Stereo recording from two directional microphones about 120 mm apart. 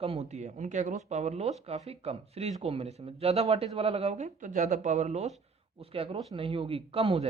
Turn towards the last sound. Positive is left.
turn(degrees=-55)  # may be behind; listen again after turning